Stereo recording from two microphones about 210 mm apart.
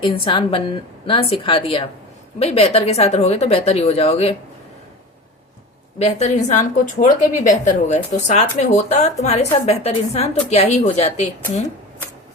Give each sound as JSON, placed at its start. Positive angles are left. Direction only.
{"t": 0.0, "sound": "a woman's voice", "side_deg": 25}
{"t": 6.0, "sound": "a woman's voice", "side_deg": 30}